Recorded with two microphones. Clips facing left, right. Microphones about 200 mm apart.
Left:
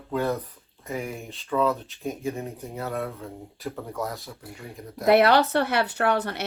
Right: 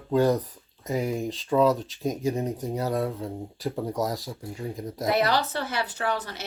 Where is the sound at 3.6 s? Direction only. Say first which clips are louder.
Right 4 dB; 35° right (ahead or behind).